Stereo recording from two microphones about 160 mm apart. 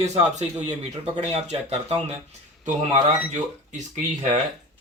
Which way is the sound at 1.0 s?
45° right (ahead or behind).